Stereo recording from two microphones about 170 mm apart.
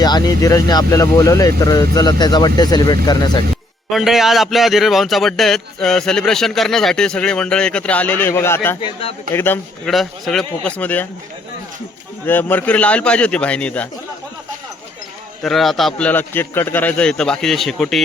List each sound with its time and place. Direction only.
0.0 s speech: 25° left (ahead or behind)
3.9 s a man's voice: centre (ahead or behind); by 8.8 s 15° left (ahead or behind)
8.8 s speech: 35° left (ahead or behind)
9.3 s a man's voice: 10° left (ahead or behind)
9.9 s a man's voice: centre (ahead or behind)
12.2 s a man's voice: 10° left (ahead or behind)
15.4 s a man's voice: centre (ahead or behind)